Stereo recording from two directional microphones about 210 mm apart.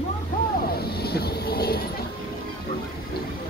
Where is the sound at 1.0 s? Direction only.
50° left (ahead or behind).